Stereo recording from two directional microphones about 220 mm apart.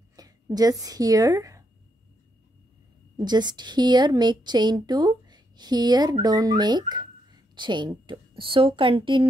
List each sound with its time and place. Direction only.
0.1 s speech: 15° right (ahead or behind)
3.2 s a woman's voice: 20° right (ahead or behind)